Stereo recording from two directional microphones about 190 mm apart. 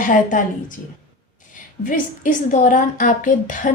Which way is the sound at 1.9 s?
45° left (ahead or behind).